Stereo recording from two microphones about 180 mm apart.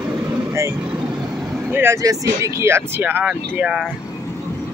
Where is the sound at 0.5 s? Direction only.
15° right (ahead or behind).